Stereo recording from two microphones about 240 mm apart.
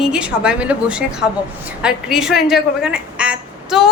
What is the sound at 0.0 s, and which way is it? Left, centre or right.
A woman's voice, centre.